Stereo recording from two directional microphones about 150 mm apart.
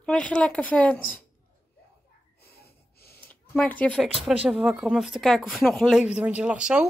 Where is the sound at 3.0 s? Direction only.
15° left (ahead or behind).